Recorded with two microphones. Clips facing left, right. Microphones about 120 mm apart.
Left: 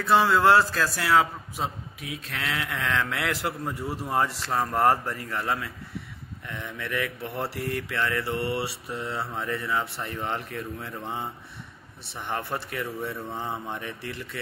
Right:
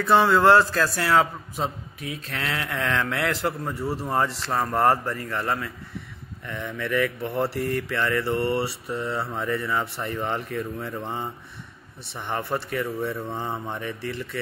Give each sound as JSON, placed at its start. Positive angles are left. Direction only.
{"t": 0.0, "sound": "a man's voice", "side_deg": 0}
{"t": 3.8, "sound": "speech", "side_deg": -35}
{"t": 4.1, "sound": "a man's voice", "side_deg": 5}
{"t": 8.4, "sound": "mantra", "side_deg": -45}
{"t": 8.8, "sound": "a man's voice", "side_deg": 0}
{"t": 12.1, "sound": "a man's voice", "side_deg": 0}